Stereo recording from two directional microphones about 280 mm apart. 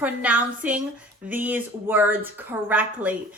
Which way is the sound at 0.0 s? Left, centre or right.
Centre.